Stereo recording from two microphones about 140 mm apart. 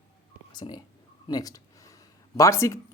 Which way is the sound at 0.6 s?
40° left (ahead or behind).